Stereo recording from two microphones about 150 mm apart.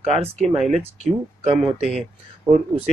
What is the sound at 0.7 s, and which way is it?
Speech, 45° right (ahead or behind).